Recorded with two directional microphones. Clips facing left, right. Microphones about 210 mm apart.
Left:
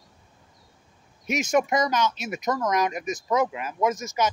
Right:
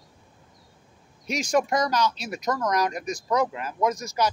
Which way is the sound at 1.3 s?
20° left (ahead or behind).